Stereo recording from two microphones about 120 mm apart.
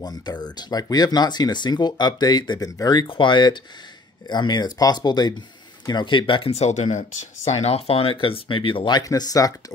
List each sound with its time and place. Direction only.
0.0 s speech: 35° left (ahead or behind)
6.5 s speech: 70° left (ahead or behind); by 9.5 s 30° left (ahead or behind)